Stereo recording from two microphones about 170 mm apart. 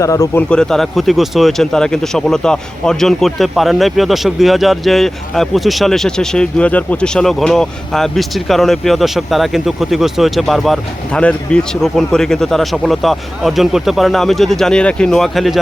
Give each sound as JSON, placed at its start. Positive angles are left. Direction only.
{"t": 0.0, "sound": "a man's voice", "side_deg": 20}
{"t": 0.5, "sound": "speech", "side_deg": 5}